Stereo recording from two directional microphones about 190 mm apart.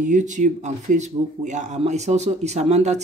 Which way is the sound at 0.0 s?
40° right (ahead or behind).